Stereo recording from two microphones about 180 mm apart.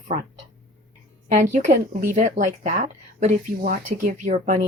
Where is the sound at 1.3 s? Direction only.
40° right (ahead or behind).